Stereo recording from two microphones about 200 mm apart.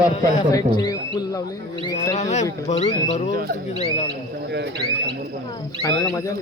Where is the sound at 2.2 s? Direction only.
35° left (ahead or behind).